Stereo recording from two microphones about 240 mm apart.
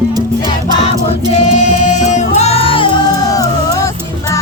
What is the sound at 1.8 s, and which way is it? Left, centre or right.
Music, left.